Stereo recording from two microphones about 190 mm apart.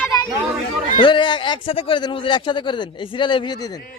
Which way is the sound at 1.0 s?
25° left (ahead or behind).